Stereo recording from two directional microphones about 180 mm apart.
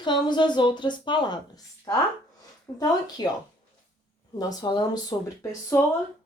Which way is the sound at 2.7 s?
20° left (ahead or behind).